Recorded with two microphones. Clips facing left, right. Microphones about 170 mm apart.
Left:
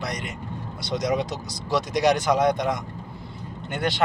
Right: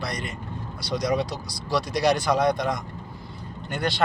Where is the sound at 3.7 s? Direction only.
20° left (ahead or behind).